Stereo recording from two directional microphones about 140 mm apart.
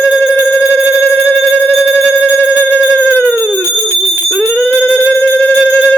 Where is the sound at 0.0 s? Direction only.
15° left (ahead or behind).